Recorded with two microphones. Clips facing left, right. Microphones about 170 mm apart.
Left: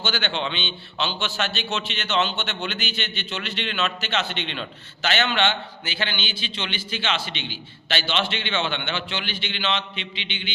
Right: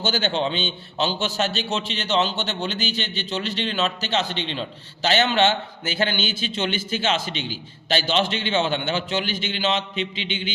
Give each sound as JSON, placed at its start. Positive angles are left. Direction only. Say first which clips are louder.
{"t": 0.0, "sound": "a man's voice", "louder": "right 4 dB", "side_deg": -40}